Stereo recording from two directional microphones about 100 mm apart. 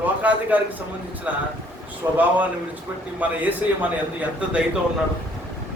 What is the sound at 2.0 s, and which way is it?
Speech, 30° right (ahead or behind).